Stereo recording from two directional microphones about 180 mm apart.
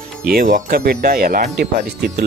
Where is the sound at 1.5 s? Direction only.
65° right (ahead or behind).